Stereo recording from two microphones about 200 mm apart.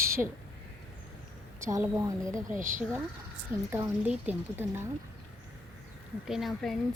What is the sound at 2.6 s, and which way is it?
Speech, 40° right (ahead or behind).